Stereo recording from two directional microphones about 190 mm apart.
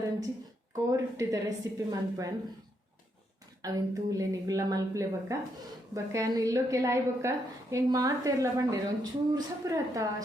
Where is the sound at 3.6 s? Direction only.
20° right (ahead or behind).